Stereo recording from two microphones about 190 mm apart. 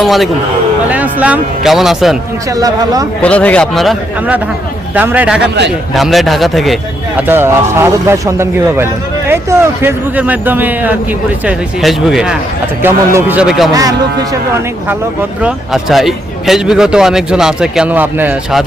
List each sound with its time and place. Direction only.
0.0 s speech: centre (ahead or behind)
2.6 s speech: 20° right (ahead or behind)
3.2 s speech: 5° left (ahead or behind)
7.2 s speech: 10° right (ahead or behind)
13.7 s speech: 20° right (ahead or behind)
15.4 s speech: 5° right (ahead or behind)